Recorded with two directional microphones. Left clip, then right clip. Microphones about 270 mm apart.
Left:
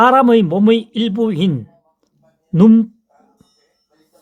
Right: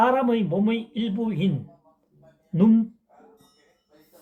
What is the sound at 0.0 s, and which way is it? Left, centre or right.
Speech, left.